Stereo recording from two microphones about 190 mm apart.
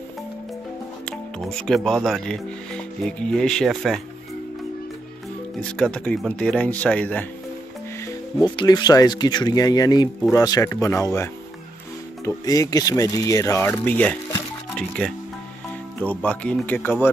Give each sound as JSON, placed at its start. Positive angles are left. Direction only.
{"t": 1.0, "sound": "speech", "side_deg": 0}
{"t": 5.6, "sound": "speech", "side_deg": 5}
{"t": 8.4, "sound": "speech", "side_deg": 20}
{"t": 12.4, "sound": "speech", "side_deg": 20}